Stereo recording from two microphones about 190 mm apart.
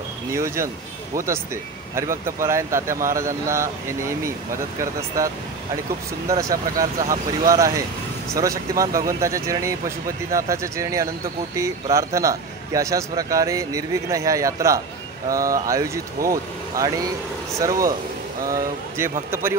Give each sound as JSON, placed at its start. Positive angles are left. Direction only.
{"t": 0.3, "sound": "speech", "side_deg": -15}
{"t": 6.2, "sound": "speech", "side_deg": -20}